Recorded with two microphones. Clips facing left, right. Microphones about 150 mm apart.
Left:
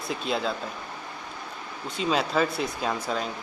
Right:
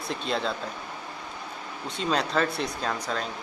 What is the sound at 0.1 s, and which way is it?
Speech, 5° left (ahead or behind).